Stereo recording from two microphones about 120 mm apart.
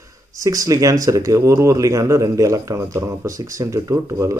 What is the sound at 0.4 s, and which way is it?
Speech, 30° right (ahead or behind).